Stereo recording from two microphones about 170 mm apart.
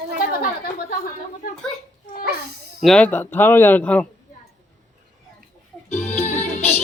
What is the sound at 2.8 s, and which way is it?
Speech, 5° left (ahead or behind).